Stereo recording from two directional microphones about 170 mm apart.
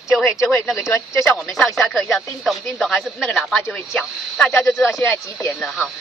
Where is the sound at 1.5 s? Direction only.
Centre (ahead or behind).